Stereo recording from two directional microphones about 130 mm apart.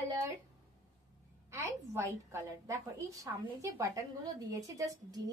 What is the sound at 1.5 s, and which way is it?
A woman's voice, 25° right (ahead or behind).